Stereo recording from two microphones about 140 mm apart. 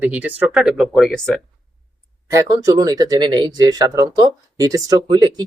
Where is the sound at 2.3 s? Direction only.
25° right (ahead or behind).